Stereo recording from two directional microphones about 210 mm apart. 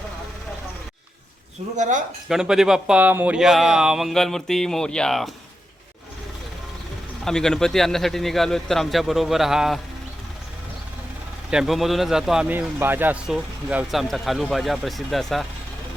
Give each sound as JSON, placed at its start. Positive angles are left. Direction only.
{"t": 1.7, "sound": "speech", "side_deg": -35}
{"t": 2.3, "sound": "a man's voice", "side_deg": 0}
{"t": 7.3, "sound": "a man's voice", "side_deg": 5}
{"t": 11.5, "sound": "a man's voice", "side_deg": 0}